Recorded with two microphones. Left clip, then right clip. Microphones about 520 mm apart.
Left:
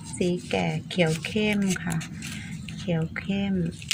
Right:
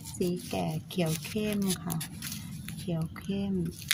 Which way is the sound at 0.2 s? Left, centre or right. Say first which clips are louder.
Left 6 dB; right.